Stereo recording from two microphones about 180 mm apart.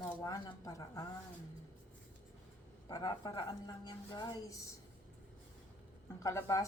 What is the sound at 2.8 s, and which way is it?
A woman's voice, 20° left (ahead or behind).